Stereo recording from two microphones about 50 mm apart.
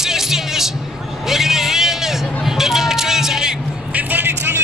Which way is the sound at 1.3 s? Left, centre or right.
Centre.